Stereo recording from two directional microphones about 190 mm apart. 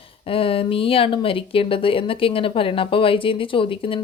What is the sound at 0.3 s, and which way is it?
Speech, 30° left (ahead or behind).